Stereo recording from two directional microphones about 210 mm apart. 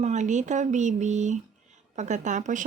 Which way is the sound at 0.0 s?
35° right (ahead or behind).